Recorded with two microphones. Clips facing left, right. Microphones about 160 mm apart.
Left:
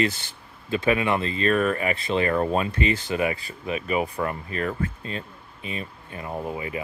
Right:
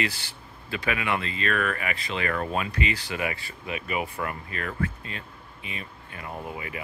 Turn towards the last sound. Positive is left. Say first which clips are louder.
# left 5 dB
turn(degrees=25)  # may be behind; listen again after turning